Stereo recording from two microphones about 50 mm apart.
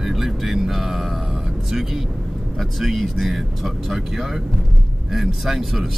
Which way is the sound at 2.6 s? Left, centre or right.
Centre.